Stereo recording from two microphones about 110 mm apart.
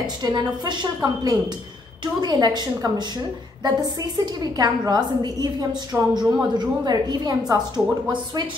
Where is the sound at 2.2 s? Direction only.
40° right (ahead or behind).